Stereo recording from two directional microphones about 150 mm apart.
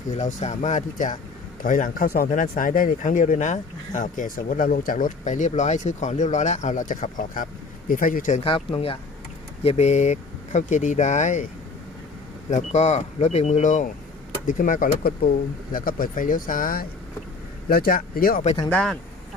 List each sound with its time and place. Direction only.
0.1 s speech: 50° left (ahead or behind)
8.4 s speech: 40° left (ahead or behind)
12.5 s speech: 50° left (ahead or behind); by 16.8 s 70° left (ahead or behind)
17.7 s speech: 85° left
18.7 s speech: 5° left (ahead or behind)